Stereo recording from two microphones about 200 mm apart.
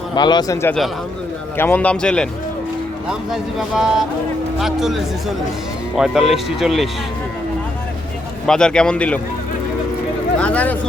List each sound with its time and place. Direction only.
0.1 s a man's voice: 20° left (ahead or behind); by 6.8 s centre (ahead or behind)
8.4 s speech: 5° left (ahead or behind)
10.4 s speech: 5° left (ahead or behind)